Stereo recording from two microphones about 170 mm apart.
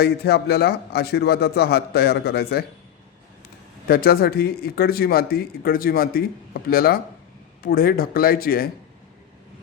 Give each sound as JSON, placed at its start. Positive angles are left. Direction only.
{"t": 0.0, "sound": "a man's voice", "side_deg": 70}
{"t": 3.8, "sound": "speech", "side_deg": 65}